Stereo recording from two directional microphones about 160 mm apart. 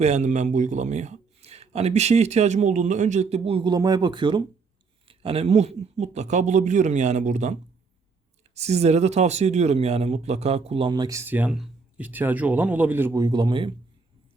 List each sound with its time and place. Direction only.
0.0 s speech: 45° right (ahead or behind); by 13.7 s 30° right (ahead or behind)